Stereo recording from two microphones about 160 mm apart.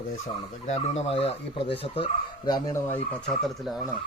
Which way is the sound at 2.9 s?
5° left (ahead or behind).